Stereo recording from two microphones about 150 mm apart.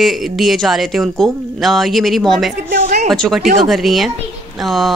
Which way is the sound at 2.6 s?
90° right.